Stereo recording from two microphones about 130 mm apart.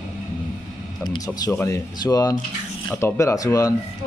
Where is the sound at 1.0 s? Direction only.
30° left (ahead or behind).